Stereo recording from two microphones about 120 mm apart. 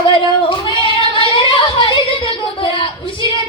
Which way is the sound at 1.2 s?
45° left (ahead or behind).